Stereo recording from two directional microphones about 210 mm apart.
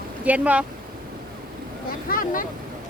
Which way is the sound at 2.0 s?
40° left (ahead or behind).